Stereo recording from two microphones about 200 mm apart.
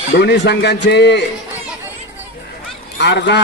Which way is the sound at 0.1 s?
60° left (ahead or behind).